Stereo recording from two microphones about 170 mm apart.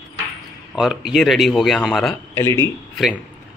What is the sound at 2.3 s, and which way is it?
Speech, 15° left (ahead or behind).